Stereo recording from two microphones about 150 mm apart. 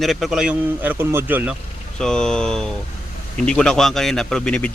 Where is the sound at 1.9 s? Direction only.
5° left (ahead or behind).